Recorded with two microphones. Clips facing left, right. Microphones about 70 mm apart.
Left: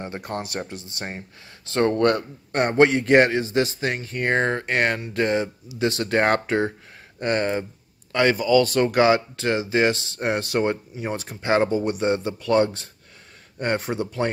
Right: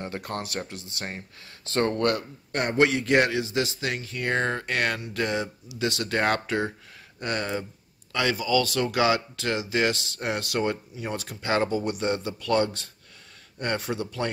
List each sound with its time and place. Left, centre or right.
0.0 s a man's voice: centre